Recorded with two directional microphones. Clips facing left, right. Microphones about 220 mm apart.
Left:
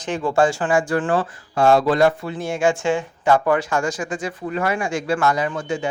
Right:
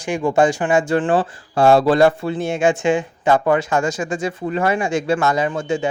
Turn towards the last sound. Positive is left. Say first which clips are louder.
# right 3 dB
turn(degrees=-25)  # may be behind; listen again after turning